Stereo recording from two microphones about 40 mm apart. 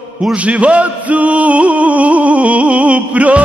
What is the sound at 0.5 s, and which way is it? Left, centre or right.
Music, right.